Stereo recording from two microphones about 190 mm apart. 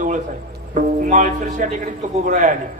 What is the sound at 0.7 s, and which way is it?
Speech, 40° right (ahead or behind).